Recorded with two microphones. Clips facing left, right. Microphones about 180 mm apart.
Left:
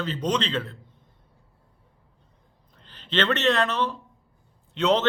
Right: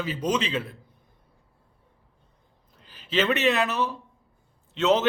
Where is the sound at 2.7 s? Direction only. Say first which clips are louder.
Even; 5° right (ahead or behind).